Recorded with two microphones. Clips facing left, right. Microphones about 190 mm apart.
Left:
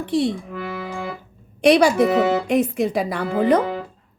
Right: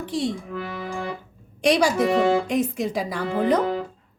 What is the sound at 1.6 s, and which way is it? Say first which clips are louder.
Speech: left 5 dB; 60° left (ahead or behind).